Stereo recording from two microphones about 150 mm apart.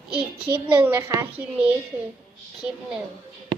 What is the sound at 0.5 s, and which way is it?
A child's voice, 10° right (ahead or behind).